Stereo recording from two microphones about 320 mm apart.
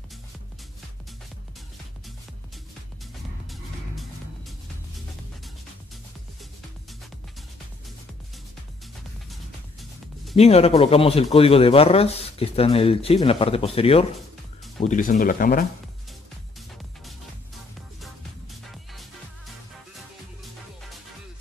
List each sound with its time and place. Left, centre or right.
3.4 s music: centre
9.3 s music: centre
10.3 s speech: centre